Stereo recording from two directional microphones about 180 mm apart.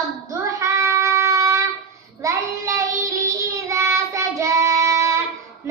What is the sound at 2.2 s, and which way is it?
Child singing, 15° right (ahead or behind).